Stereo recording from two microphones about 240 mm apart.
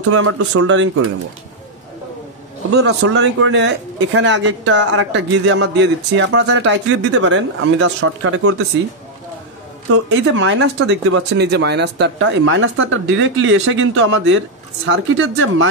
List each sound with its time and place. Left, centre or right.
0.1 s speech: right
2.8 s speech: right
10.0 s speech: right